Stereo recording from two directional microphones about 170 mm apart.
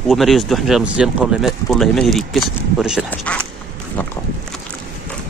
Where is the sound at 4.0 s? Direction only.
10° left (ahead or behind).